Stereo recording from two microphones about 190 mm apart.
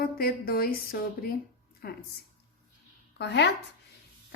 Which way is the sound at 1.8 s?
55° left (ahead or behind).